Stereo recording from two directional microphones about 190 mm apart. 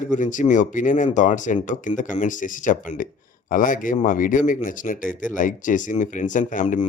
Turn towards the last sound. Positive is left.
turn(degrees=45)  # may be behind; listen again after turning